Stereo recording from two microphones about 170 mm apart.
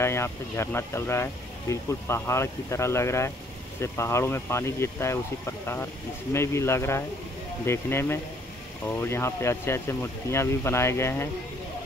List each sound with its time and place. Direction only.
0.0 s speech: 15° left (ahead or behind)
6.3 s speech: 15° left (ahead or behind)